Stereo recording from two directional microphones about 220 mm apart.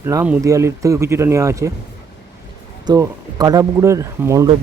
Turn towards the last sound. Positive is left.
turn(degrees=-15)  # may be behind; listen again after turning